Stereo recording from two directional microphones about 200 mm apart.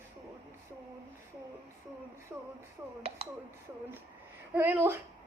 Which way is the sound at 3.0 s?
30° right (ahead or behind).